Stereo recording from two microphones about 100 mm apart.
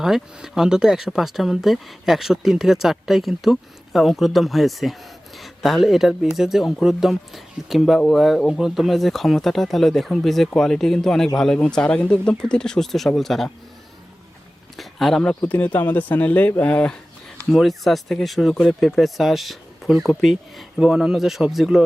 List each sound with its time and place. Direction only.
0.0 s speech: 5° right (ahead or behind)
14.8 s speech: centre (ahead or behind)
15.4 s speech: 15° left (ahead or behind)
17.5 s speech: centre (ahead or behind)